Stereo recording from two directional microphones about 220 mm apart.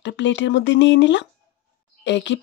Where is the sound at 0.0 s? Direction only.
55° left (ahead or behind).